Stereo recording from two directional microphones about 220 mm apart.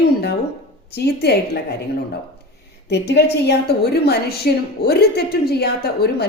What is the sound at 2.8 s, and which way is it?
A woman's voice, 50° left (ahead or behind).